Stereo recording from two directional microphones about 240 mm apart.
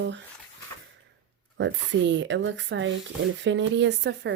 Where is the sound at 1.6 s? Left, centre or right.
Right.